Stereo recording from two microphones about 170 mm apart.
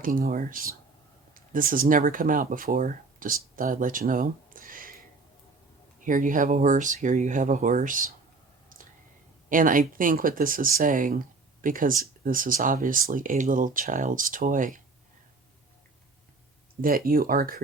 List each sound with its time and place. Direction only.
0.0 s speech: 55° right (ahead or behind)
6.1 s speech: 50° right (ahead or behind)
8.7 s whispering: 55° right (ahead or behind)
9.5 s speech: 55° right (ahead or behind)
16.8 s speech: 60° right (ahead or behind)